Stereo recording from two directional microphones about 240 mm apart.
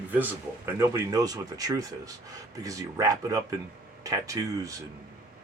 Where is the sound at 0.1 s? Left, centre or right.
Centre.